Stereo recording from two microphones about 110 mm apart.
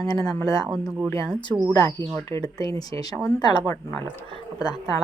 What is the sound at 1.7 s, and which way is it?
Speech, 35° left (ahead or behind).